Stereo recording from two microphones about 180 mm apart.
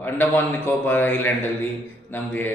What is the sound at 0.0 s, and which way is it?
A man's voice, 10° left (ahead or behind).